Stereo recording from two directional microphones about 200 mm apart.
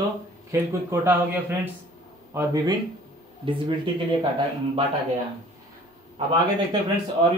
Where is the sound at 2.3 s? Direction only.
20° right (ahead or behind).